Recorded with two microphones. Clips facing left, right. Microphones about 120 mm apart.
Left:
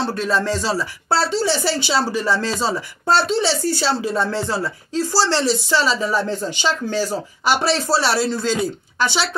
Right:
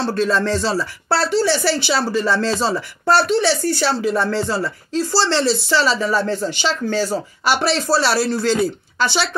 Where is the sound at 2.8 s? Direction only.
60° right (ahead or behind).